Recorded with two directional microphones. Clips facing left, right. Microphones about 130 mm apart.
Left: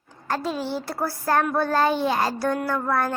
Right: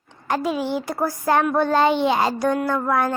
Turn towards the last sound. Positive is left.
turn(degrees=-15)  # may be behind; listen again after turning